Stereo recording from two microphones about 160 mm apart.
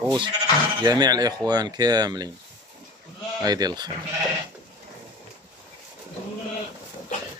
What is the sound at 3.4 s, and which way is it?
Speech, 25° right (ahead or behind).